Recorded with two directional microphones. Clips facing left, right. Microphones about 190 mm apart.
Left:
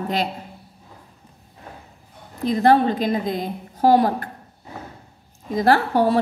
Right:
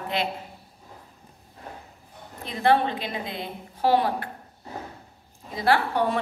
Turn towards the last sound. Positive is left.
turn(degrees=40)  # may be behind; listen again after turning